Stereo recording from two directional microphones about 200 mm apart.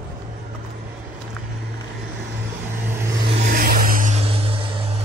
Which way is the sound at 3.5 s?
45° right (ahead or behind).